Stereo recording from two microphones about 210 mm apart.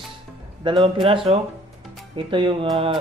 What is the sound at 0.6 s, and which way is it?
Speech, 25° right (ahead or behind).